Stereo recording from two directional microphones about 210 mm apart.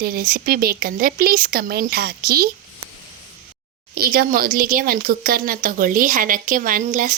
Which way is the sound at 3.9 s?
45° right (ahead or behind).